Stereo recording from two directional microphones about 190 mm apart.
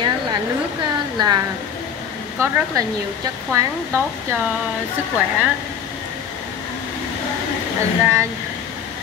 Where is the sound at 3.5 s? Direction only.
15° right (ahead or behind).